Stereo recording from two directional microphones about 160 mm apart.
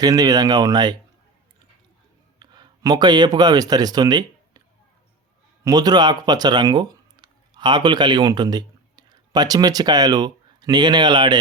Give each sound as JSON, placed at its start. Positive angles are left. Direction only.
{"t": 0.0, "sound": "speech", "side_deg": -25}
{"t": 2.4, "sound": "speech", "side_deg": -25}
{"t": 5.6, "sound": "speech", "side_deg": -25}